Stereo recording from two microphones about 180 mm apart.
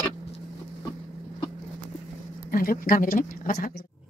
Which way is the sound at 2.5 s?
50° left (ahead or behind).